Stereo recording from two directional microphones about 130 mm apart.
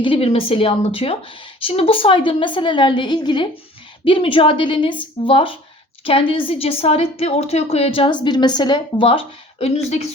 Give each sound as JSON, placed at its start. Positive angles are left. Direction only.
{"t": 0.0, "sound": "a woman's voice", "side_deg": 45}